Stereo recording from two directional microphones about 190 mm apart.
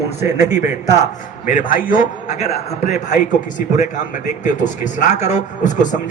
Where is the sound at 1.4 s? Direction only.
45° left (ahead or behind).